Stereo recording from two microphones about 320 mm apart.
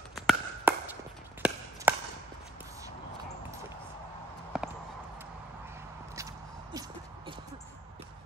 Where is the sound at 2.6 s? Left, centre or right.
Centre.